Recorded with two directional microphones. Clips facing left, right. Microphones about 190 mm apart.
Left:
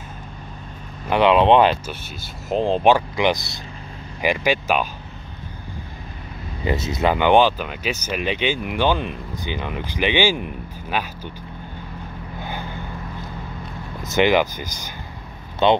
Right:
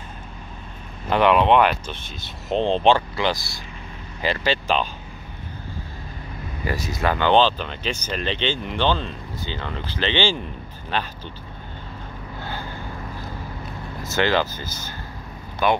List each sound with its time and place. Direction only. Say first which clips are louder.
1.1 s speech: left 2 dB; 20° left (ahead or behind)
2.5 s speech: left 1 dB; 5° left (ahead or behind)
6.6 s speech: left 4 dB; 20° left (ahead or behind)
12.4 s vehicle: left 2 dB; 15° left (ahead or behind)
14.0 s speech: left 4 dB; 15° left (ahead or behind)